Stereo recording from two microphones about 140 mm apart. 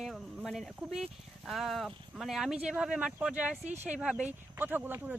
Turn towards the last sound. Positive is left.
turn(degrees=-15)  # may be behind; listen again after turning